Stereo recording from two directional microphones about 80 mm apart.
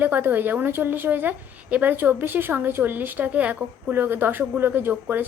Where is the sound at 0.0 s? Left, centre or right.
Right.